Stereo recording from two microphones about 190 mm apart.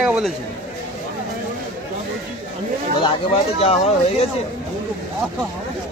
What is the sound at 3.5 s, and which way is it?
Speech, 30° left (ahead or behind).